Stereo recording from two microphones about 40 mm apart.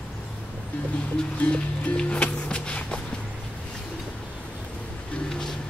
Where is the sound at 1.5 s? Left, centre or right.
Left.